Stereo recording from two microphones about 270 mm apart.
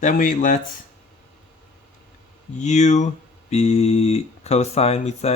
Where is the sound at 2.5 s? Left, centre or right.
Left.